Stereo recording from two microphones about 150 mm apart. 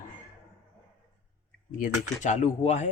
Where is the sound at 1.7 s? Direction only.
60° left (ahead or behind).